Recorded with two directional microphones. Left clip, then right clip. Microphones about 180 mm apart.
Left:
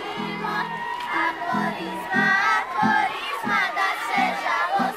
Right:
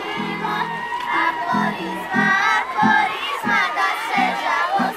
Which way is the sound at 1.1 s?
5° left (ahead or behind).